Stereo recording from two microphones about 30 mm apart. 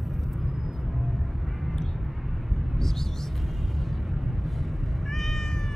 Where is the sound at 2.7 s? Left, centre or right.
Centre.